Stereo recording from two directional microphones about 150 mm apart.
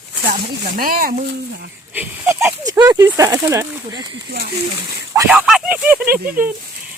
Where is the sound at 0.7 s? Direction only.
75° right (ahead or behind).